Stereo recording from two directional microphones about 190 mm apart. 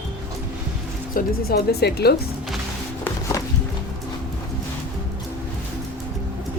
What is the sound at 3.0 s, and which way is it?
Music, 15° left (ahead or behind).